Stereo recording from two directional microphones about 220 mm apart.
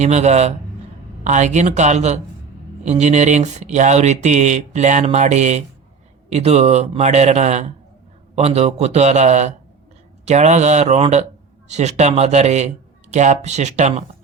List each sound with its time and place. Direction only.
0.0 s speech: 30° right (ahead or behind)